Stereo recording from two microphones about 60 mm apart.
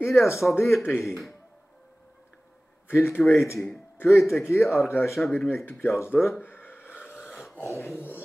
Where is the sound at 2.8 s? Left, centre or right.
Left.